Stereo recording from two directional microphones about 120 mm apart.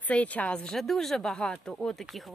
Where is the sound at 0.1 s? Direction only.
10° left (ahead or behind).